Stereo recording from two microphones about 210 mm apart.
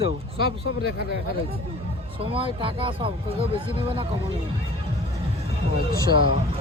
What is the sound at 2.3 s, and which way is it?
Speech, 25° right (ahead or behind).